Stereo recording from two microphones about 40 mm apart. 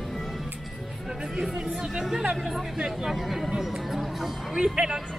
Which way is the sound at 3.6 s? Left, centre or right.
Centre.